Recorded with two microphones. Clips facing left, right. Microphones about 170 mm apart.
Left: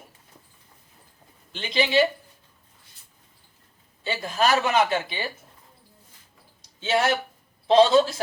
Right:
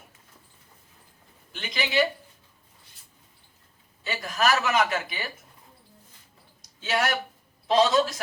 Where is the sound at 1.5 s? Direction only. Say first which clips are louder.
Left 6 dB; 30° left (ahead or behind).